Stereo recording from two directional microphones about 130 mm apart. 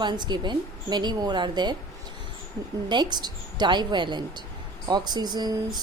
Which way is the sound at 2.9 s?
35° right (ahead or behind).